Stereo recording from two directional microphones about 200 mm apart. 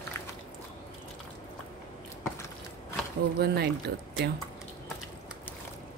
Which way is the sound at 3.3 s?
55° right (ahead or behind).